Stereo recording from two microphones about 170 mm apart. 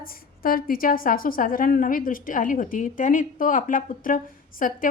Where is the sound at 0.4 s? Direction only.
55° left (ahead or behind).